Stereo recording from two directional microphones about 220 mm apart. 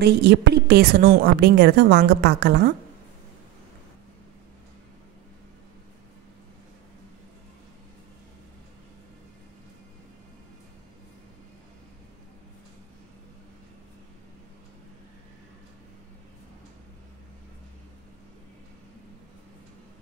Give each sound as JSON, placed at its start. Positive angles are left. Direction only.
{"t": 0.0, "sound": "a woman's voice", "side_deg": -50}